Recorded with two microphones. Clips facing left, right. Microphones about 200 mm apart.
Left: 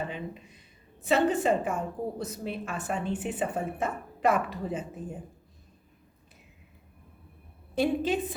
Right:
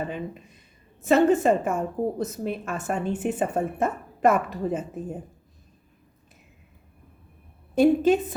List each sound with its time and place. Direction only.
1.0 s a woman's voice: 45° right (ahead or behind)
7.8 s a woman's voice: 45° right (ahead or behind)